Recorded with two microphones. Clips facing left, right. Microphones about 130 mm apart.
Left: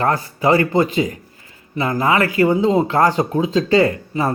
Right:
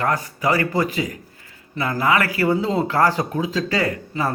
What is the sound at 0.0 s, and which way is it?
Speech, 30° left (ahead or behind).